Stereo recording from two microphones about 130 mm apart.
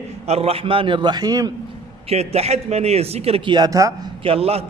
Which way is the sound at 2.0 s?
55° right (ahead or behind).